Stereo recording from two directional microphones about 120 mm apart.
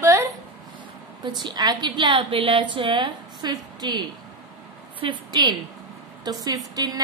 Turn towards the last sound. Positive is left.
turn(degrees=-30)  # may be behind; listen again after turning